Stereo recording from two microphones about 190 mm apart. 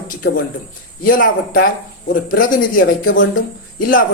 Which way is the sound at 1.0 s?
45° left (ahead or behind).